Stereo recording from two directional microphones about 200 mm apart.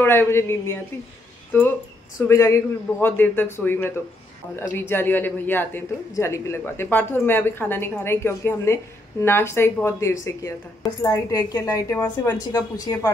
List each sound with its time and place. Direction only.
0.0 s a man's voice: 10° left (ahead or behind)
2.2 s a man's voice: 15° left (ahead or behind)